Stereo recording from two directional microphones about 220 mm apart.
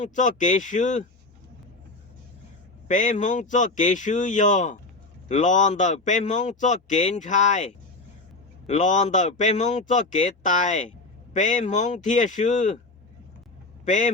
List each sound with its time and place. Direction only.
0.0 s speech: 35° left (ahead or behind)
2.8 s speech: 35° left (ahead or behind)
13.8 s speech: 35° left (ahead or behind)